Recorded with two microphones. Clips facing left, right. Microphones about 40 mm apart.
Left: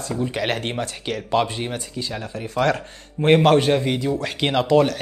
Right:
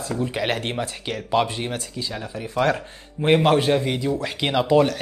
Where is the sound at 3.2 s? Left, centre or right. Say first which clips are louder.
Left 2 dB; centre.